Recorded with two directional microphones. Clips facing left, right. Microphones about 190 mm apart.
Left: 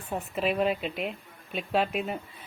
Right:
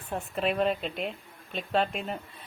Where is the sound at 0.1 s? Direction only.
5° left (ahead or behind).